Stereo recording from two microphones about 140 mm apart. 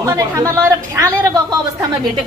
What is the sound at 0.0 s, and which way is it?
A woman's voice, 20° right (ahead or behind).